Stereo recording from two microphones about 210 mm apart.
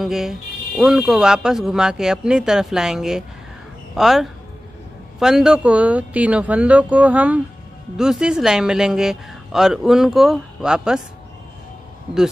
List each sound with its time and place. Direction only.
0.0 s speech: centre (ahead or behind)